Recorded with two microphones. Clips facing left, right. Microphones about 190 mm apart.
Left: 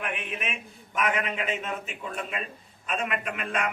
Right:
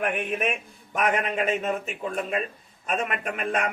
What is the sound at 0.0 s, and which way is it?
A man's voice, 45° right (ahead or behind).